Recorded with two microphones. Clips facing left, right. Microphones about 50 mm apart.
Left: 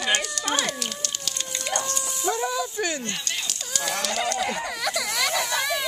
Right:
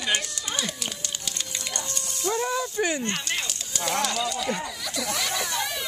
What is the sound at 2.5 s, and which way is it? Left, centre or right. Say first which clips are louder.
Speech: right 1 dB; right.